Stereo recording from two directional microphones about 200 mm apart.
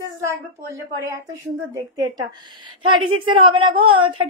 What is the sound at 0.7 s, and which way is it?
Speech, 15° right (ahead or behind).